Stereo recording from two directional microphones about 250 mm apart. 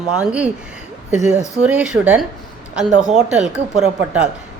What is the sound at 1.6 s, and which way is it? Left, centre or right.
Speech, centre.